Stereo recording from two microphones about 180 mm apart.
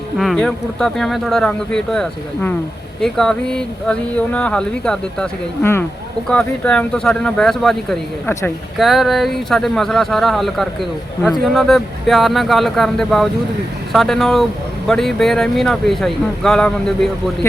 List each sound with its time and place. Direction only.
0.2 s speech: centre (ahead or behind)
8.3 s speech: 15° left (ahead or behind)
8.8 s speech: centre (ahead or behind)